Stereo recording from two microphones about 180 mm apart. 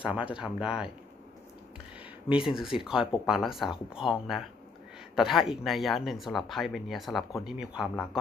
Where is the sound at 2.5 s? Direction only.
Centre (ahead or behind).